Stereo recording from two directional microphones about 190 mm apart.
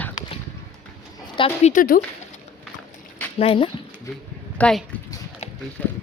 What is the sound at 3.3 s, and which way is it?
Speech, 30° left (ahead or behind).